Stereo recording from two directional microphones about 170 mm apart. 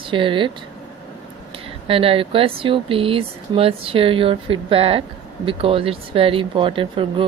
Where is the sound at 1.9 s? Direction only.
35° right (ahead or behind).